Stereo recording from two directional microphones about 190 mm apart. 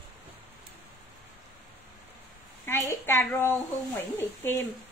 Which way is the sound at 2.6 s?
15° left (ahead or behind).